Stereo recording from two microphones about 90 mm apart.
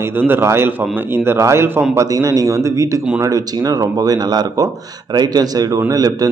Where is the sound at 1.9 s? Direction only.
35° right (ahead or behind).